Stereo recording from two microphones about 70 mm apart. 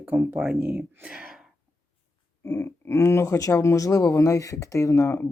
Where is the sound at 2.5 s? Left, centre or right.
Left.